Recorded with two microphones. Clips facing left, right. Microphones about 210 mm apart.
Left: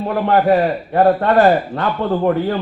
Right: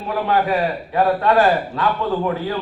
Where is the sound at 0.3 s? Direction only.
50° left (ahead or behind).